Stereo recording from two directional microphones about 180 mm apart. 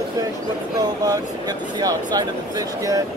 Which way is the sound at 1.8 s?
20° right (ahead or behind).